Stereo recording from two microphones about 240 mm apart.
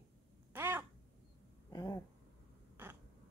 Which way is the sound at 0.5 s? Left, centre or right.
Centre.